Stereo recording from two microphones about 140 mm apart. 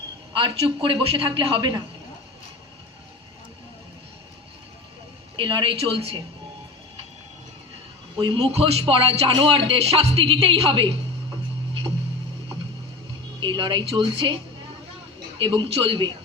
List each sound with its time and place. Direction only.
0.3 s speech: 40° right (ahead or behind)
5.4 s speech: 35° right (ahead or behind)
8.2 s speech: 45° right (ahead or behind)
13.4 s speech: 35° right (ahead or behind)
15.4 s speech: 35° right (ahead or behind)